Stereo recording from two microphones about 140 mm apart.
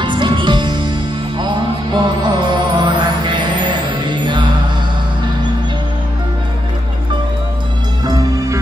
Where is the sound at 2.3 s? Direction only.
35° right (ahead or behind).